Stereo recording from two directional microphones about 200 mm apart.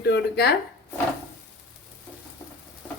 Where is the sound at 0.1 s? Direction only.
55° left (ahead or behind).